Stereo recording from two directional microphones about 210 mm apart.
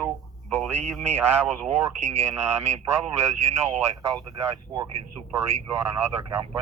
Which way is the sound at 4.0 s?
15° right (ahead or behind).